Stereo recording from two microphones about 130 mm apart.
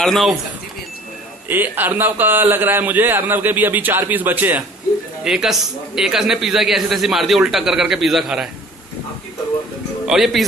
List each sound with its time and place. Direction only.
0.0 s a man's voice: centre (ahead or behind)
1.5 s a man's voice: 15° right (ahead or behind)
10.0 s speech: centre (ahead or behind)